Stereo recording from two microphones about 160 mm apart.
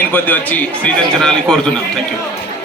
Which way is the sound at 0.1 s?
10° left (ahead or behind).